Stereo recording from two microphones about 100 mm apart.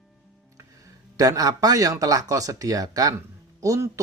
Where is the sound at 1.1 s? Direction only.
35° right (ahead or behind).